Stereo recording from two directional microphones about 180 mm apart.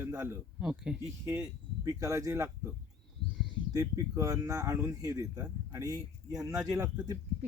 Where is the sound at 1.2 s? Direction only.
15° right (ahead or behind).